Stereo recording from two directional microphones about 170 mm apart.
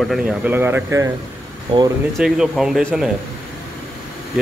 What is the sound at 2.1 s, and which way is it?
Speech, centre (ahead or behind).